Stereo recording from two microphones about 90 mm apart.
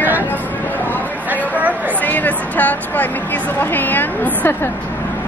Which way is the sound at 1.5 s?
20° right (ahead or behind).